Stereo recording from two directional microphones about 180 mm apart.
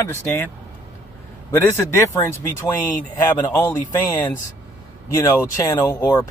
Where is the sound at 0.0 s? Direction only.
15° left (ahead or behind).